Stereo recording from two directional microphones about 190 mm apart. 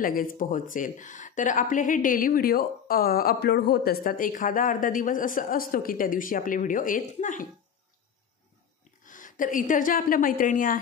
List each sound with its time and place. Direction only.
0.0 s speech: 45° left (ahead or behind)
9.0 s a woman's voice: 45° left (ahead or behind)